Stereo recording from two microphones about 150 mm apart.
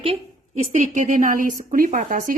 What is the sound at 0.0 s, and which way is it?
Speech, 40° right (ahead or behind).